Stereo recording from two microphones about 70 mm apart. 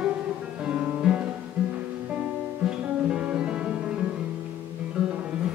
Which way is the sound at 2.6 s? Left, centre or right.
Centre.